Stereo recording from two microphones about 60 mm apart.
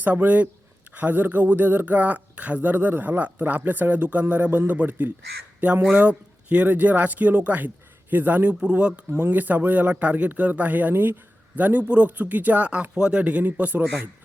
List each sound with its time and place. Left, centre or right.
0.0 s speech: right
8.6 s speech: centre
9.1 s speech: right
11.5 s speech: right